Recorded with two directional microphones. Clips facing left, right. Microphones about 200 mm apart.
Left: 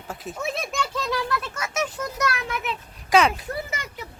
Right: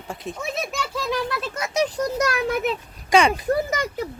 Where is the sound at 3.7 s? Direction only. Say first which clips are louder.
Right 9 dB; 40° right (ahead or behind).